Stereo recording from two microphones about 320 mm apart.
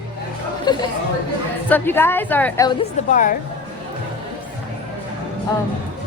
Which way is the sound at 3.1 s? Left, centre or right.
Left.